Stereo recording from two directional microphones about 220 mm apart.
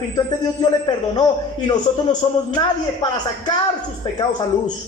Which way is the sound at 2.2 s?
20° left (ahead or behind).